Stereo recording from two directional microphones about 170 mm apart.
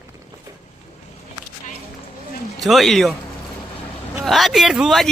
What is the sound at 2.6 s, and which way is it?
Speech, centre (ahead or behind).